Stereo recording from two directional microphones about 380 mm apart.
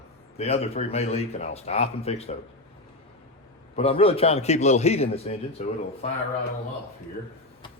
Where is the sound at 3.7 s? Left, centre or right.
Centre.